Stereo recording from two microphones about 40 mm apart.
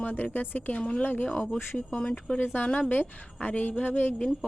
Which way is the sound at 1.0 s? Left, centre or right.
Left.